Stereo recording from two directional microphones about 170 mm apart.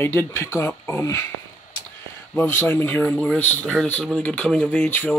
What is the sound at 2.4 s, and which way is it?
Speech, 10° left (ahead or behind).